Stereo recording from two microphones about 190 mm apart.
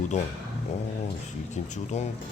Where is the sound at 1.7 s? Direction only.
40° left (ahead or behind).